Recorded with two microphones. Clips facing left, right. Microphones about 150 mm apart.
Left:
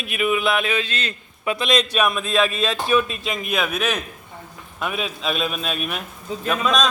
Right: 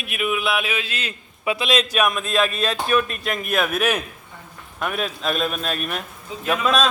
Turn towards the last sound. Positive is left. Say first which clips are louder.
# right 1 dB
turn(degrees=-5)  # may be behind; listen again after turning